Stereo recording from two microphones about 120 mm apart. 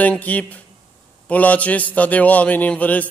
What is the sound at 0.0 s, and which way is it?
A man's voice, 15° left (ahead or behind).